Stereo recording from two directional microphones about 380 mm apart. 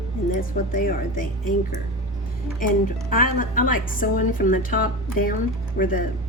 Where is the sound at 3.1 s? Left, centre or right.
Left.